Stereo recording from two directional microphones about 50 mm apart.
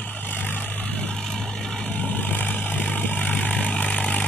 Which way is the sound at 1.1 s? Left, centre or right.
Centre.